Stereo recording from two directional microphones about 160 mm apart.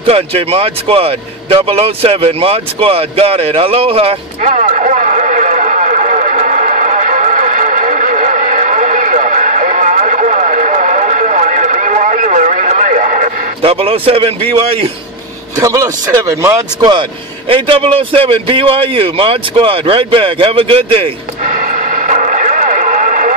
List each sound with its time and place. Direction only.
0.0 s speech: 40° right (ahead or behind)
4.4 s a sound: 50° right (ahead or behind)
13.6 s speech: 35° right (ahead or behind)
15.5 s speech: 20° right (ahead or behind)
17.5 s speech: 35° right (ahead or behind)
21.4 s radio: 55° right (ahead or behind)